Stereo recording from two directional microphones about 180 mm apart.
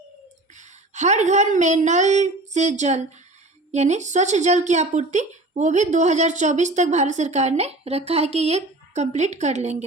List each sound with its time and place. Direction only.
0.5 s speech: 40° right (ahead or behind)